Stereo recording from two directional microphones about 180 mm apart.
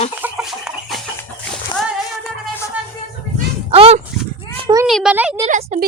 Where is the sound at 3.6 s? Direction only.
30° right (ahead or behind).